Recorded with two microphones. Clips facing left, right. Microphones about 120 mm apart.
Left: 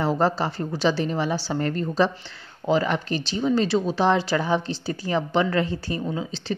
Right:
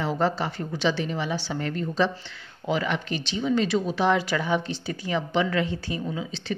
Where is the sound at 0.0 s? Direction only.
40° left (ahead or behind).